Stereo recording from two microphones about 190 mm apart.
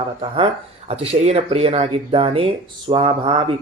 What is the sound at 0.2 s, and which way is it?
Speech, 30° right (ahead or behind).